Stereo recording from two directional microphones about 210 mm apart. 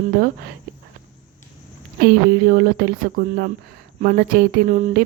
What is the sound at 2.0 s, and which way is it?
Speech, 50° right (ahead or behind).